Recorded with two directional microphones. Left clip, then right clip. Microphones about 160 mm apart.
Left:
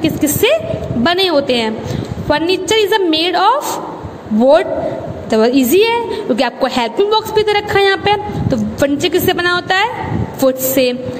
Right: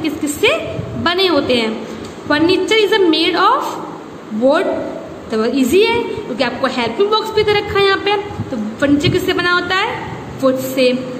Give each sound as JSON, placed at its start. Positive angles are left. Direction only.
{"t": 0.0, "sound": "a woman's voice", "side_deg": 45}
{"t": 5.3, "sound": "a woman's voice", "side_deg": 45}